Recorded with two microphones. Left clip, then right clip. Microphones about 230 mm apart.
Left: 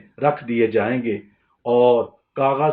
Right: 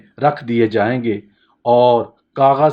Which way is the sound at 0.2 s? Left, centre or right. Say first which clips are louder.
Right 3 dB; right.